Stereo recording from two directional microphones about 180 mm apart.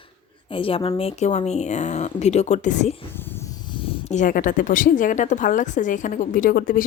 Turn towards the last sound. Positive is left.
turn(degrees=50)  # may be behind; listen again after turning